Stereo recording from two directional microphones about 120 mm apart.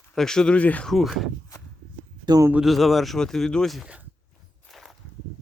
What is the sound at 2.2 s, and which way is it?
Speech, 30° right (ahead or behind).